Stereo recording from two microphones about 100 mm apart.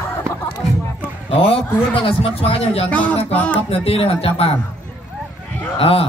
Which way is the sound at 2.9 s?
15° left (ahead or behind).